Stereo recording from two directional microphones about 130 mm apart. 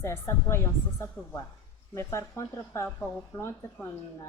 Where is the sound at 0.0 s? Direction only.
20° left (ahead or behind).